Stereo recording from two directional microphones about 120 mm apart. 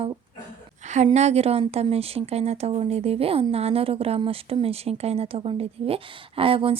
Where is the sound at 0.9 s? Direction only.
75° right (ahead or behind).